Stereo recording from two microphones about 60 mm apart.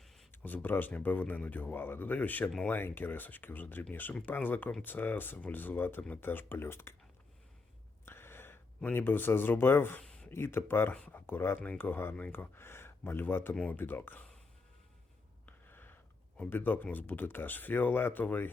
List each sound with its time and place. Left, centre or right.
0.3 s speech: left
8.0 s gasp: left
8.8 s speech: left
10.0 s a sound: centre
10.2 s speech: left
15.4 s a sound: left
16.5 s speech: left